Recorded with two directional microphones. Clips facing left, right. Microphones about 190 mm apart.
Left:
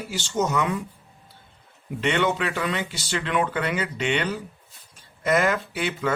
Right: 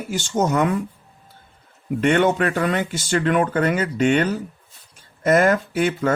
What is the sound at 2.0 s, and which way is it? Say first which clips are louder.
Speech: right 6 dB; 50° right (ahead or behind).